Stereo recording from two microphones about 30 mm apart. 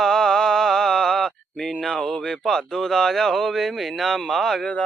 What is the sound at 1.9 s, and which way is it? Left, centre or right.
Speech, left.